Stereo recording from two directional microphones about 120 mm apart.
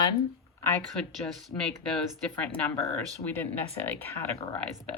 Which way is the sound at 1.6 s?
5° left (ahead or behind).